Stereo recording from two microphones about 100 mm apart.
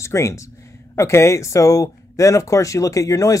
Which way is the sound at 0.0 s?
30° left (ahead or behind).